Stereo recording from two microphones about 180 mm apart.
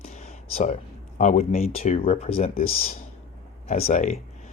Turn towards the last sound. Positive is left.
turn(degrees=40)  # may be behind; listen again after turning